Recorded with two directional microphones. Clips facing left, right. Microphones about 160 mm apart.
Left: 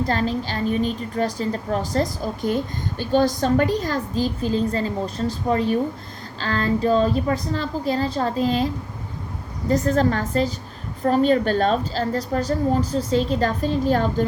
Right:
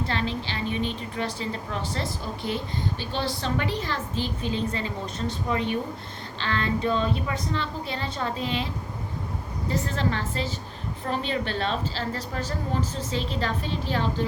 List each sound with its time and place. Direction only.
0.0 s a woman's voice: 40° left (ahead or behind)